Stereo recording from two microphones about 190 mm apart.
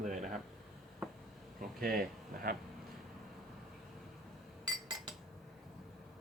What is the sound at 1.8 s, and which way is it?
Speech, 50° right (ahead or behind).